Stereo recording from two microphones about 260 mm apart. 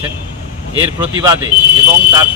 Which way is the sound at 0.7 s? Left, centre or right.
Centre.